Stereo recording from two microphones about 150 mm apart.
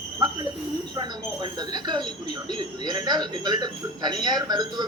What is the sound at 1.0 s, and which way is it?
Speech, 30° right (ahead or behind).